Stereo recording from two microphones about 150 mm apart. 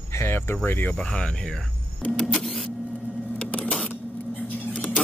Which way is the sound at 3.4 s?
10° left (ahead or behind).